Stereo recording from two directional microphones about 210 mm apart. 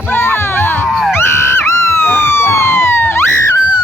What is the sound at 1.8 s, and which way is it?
Police car, 10° left (ahead or behind).